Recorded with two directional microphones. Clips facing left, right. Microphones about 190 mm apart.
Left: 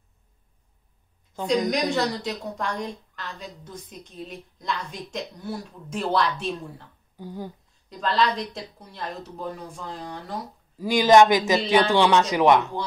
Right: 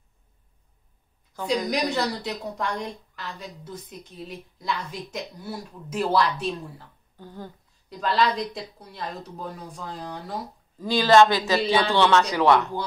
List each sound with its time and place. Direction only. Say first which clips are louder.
1.7 s a woman's voice: left 1 dB; centre (ahead or behind)
7.2 s speech: left 4 dB; 10° left (ahead or behind)
7.9 s a woman's voice: even; 5° right (ahead or behind)
10.8 s speech: left 1 dB; 15° left (ahead or behind)